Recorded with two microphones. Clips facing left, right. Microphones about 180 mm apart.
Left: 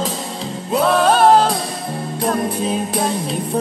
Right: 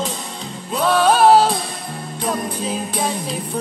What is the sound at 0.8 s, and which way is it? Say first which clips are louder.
Music: even; 5° right (ahead or behind).